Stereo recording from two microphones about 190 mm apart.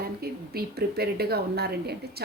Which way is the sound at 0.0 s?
55° right (ahead or behind).